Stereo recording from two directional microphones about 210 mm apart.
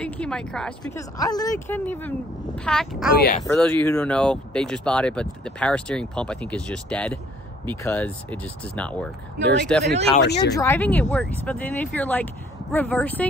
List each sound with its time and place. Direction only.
0.0 s speech: 5° left (ahead or behind)
1.1 s speech: 15° left (ahead or behind); by 3.1 s centre (ahead or behind)
3.1 s speech: 45° left (ahead or behind)
3.4 s speech: 5° left (ahead or behind)
9.4 s speech: 55° right (ahead or behind)
10.5 s speech: 10° left (ahead or behind)